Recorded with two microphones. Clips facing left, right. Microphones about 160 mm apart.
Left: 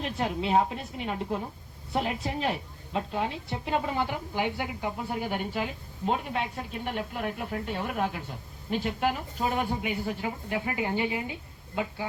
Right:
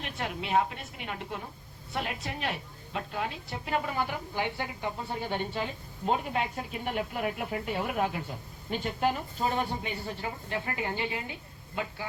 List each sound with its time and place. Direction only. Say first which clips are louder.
0.0 s a woman's voice: left 6 dB; 30° left (ahead or behind)